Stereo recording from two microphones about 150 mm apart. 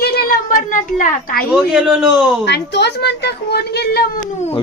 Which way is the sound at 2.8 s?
90° left.